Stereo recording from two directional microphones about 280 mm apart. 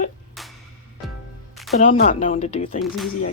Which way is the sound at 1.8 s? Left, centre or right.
Left.